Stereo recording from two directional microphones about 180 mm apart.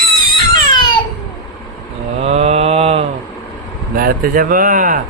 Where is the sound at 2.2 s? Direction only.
35° right (ahead or behind).